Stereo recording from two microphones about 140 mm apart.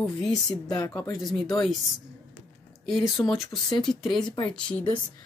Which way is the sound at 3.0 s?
25° left (ahead or behind).